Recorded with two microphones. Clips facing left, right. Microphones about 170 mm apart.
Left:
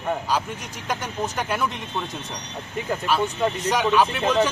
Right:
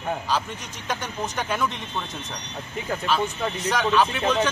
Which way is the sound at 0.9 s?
Centre (ahead or behind).